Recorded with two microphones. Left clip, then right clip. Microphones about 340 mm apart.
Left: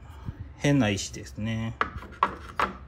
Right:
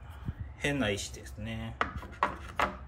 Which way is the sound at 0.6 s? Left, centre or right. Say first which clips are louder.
Left 6 dB; centre.